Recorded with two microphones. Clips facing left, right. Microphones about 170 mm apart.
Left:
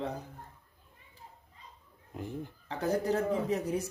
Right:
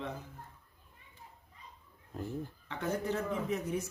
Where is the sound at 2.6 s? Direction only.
35° left (ahead or behind).